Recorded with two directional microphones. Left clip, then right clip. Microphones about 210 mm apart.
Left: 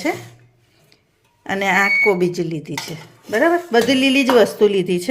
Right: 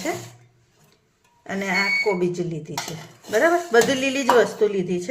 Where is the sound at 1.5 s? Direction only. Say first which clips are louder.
Left 6 dB; 40° left (ahead or behind).